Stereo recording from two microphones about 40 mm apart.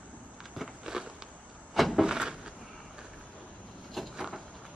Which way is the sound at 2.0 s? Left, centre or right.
Centre.